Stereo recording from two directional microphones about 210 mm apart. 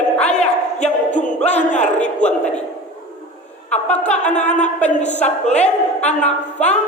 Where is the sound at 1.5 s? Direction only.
35° left (ahead or behind).